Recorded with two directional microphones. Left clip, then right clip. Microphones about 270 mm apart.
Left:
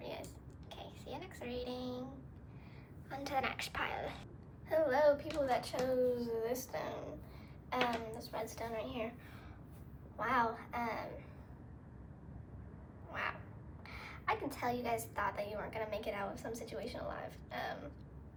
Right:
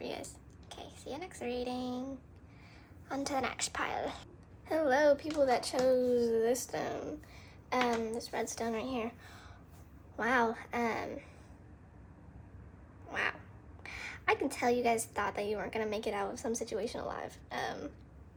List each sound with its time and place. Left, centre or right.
0.7 s a sound: centre
3.1 s a woman's voice: centre
4.7 s a woman's voice: right
10.2 s a woman's voice: right
13.1 s a sound: right
13.8 s a woman's voice: right